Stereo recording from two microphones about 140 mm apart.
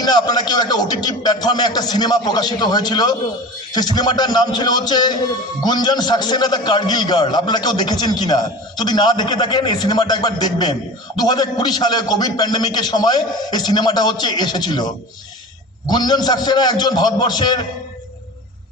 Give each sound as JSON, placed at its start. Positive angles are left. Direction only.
{"t": 0.0, "sound": "a man's voice", "side_deg": 30}